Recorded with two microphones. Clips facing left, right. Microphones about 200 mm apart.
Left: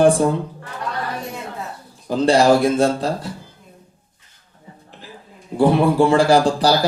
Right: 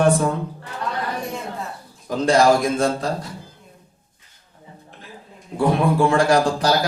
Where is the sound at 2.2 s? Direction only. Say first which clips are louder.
Left 2 dB; 30° left (ahead or behind).